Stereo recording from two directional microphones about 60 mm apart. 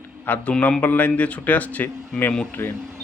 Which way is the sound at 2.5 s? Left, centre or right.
Left.